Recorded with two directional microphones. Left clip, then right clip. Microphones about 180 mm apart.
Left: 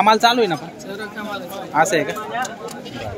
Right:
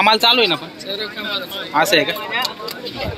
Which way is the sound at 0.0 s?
20° left (ahead or behind).